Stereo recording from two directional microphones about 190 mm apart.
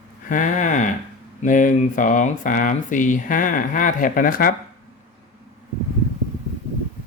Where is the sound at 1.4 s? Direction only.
45° left (ahead or behind).